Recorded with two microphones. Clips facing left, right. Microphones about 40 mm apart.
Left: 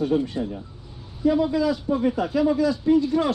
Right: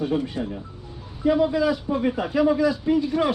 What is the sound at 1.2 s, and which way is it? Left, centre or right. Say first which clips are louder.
A man's voice: right 1 dB; right.